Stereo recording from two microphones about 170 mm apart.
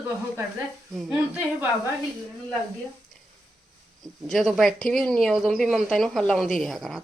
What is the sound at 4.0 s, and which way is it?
A woman's voice, centre (ahead or behind).